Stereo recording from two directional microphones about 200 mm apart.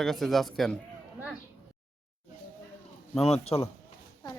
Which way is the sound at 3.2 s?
30° left (ahead or behind).